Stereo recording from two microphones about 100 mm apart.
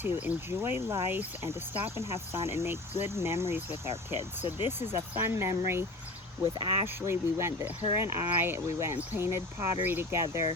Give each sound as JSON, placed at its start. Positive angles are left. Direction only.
{"t": 0.0, "sound": "speech", "side_deg": -20}
{"t": 6.4, "sound": "speech", "side_deg": -60}
{"t": 6.8, "sound": "speech", "side_deg": -25}